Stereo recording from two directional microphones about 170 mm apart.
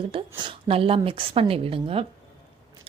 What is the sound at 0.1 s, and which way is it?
A woman's voice, 30° right (ahead or behind).